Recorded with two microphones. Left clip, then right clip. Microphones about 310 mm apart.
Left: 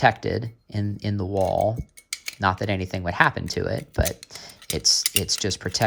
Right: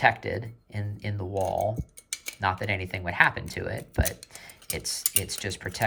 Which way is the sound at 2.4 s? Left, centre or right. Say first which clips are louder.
Left 4 dB; centre.